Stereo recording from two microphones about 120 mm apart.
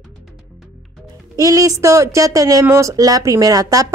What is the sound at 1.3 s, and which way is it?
A woman's voice, 30° right (ahead or behind).